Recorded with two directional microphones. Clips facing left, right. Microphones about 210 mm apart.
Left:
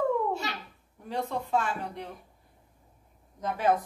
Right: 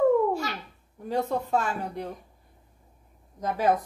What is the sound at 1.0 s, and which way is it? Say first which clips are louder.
A woman's voice: right 5 dB; 40° right (ahead or behind).